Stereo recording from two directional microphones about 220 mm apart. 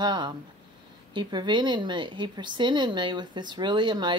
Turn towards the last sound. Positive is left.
turn(degrees=-20)  # may be behind; listen again after turning